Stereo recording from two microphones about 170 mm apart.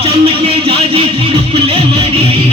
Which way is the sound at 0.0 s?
35° right (ahead or behind).